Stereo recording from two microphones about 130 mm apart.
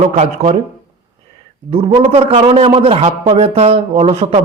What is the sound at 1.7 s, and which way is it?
A man's voice, 50° right (ahead or behind).